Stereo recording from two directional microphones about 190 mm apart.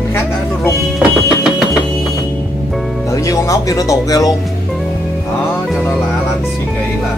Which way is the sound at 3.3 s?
15° left (ahead or behind).